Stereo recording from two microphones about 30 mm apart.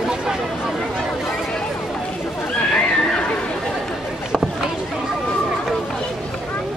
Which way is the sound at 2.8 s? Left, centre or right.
Left.